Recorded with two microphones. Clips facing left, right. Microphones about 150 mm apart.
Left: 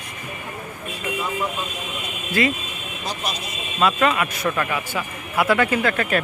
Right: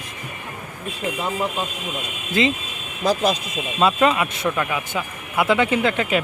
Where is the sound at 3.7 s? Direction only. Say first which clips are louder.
Right 2 dB; 25° right (ahead or behind).